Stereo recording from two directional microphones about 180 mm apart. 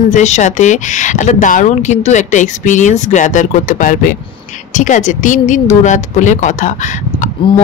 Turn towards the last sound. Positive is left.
turn(degrees=45)  # may be behind; listen again after turning